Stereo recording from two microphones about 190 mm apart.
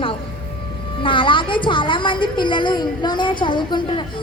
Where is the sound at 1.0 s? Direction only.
25° left (ahead or behind).